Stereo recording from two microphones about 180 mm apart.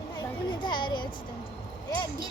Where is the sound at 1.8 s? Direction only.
25° left (ahead or behind).